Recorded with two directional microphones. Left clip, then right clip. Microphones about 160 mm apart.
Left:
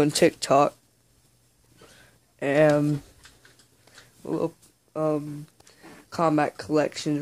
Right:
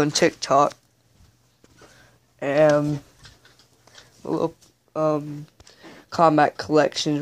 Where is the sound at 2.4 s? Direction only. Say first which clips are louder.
Right 2 dB; 30° left (ahead or behind).